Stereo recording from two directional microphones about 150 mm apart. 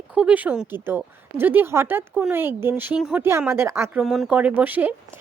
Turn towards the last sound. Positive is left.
turn(degrees=-10)  # may be behind; listen again after turning